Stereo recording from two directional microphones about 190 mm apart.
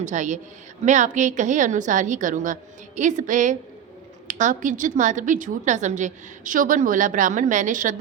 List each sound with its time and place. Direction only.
0.0 s a woman's voice: 40° right (ahead or behind)